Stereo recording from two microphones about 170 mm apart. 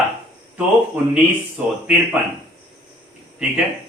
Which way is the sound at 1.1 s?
5° right (ahead or behind).